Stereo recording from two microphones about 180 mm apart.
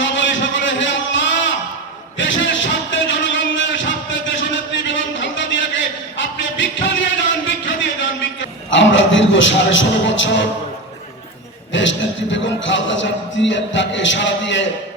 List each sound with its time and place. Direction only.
0.0 s a sound: 90° left
8.7 s a man's voice: 90° left
11.7 s a man's voice: 90° left